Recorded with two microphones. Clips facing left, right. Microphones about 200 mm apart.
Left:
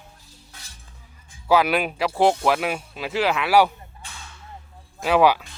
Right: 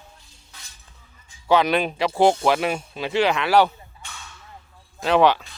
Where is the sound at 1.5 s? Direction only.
5° left (ahead or behind).